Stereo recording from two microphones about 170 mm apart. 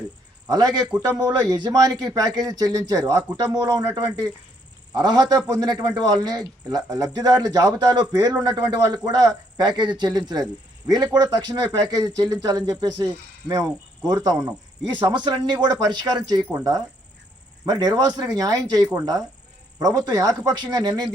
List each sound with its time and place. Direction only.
0.4 s a man's voice: 25° right (ahead or behind)
0.9 s a man's voice: 5° right (ahead or behind)
1.5 s a man's voice: 20° right (ahead or behind)